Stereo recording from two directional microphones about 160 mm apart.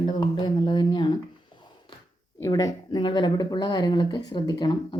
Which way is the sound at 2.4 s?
25° left (ahead or behind).